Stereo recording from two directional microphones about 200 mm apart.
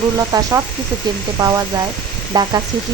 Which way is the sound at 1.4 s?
15° right (ahead or behind).